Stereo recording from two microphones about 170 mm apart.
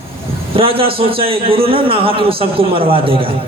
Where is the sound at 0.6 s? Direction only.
35° right (ahead or behind).